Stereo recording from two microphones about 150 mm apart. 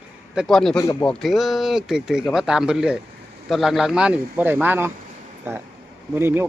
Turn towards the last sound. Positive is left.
turn(degrees=-15)  # may be behind; listen again after turning